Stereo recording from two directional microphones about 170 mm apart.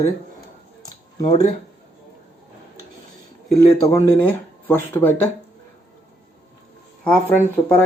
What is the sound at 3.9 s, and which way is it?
Speech, 15° left (ahead or behind).